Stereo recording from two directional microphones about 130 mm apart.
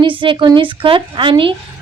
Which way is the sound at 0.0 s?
40° right (ahead or behind).